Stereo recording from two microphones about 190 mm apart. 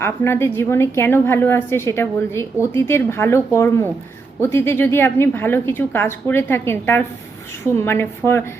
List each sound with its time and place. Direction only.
0.0 s a woman's voice: 10° left (ahead or behind)